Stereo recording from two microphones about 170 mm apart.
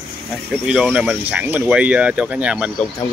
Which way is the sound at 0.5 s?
5° right (ahead or behind).